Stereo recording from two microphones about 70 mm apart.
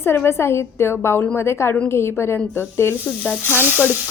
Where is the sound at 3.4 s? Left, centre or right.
Right.